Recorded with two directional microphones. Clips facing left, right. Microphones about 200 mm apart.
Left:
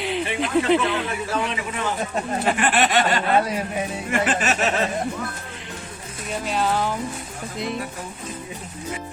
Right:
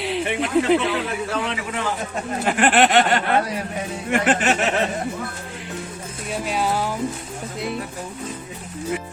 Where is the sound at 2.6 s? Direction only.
60° right (ahead or behind).